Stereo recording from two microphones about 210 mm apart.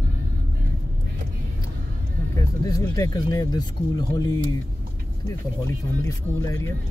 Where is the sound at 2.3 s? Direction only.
15° left (ahead or behind).